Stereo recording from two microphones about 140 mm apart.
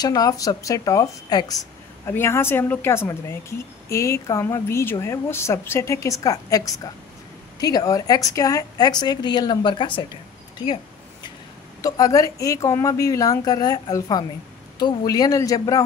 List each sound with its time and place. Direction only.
0.0 s speech: 25° left (ahead or behind)
11.8 s speech: 25° left (ahead or behind)